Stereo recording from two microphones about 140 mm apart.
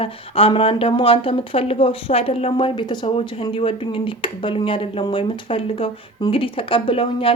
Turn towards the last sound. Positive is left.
turn(degrees=40)  # may be behind; listen again after turning